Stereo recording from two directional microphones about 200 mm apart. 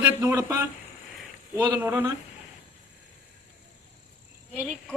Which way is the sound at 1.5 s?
10° right (ahead or behind).